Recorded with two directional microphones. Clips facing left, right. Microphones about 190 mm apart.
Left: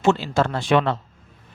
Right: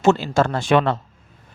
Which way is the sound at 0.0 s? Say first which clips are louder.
Right 2 dB; 45° right (ahead or behind).